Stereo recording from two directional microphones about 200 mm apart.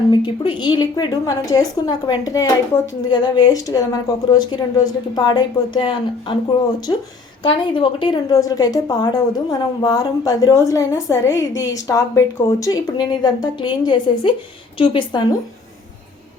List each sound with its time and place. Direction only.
0.1 s a woman's voice: 20° left (ahead or behind)